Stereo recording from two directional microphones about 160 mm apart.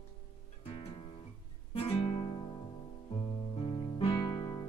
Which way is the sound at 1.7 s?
35° left (ahead or behind).